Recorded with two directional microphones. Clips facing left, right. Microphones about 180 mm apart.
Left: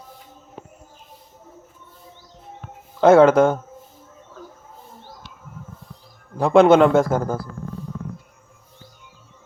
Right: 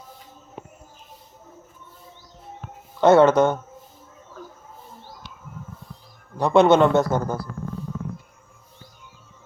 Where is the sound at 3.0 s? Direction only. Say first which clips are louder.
Left 2 dB; 90° left.